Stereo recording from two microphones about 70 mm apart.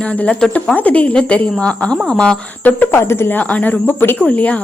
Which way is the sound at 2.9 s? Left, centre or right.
Left.